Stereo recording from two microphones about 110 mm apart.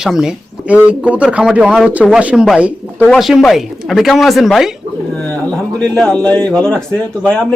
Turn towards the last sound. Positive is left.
turn(degrees=10)  # may be behind; listen again after turning